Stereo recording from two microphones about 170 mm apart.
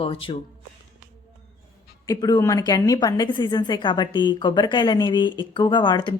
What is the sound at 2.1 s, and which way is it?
A woman's voice, 25° left (ahead or behind).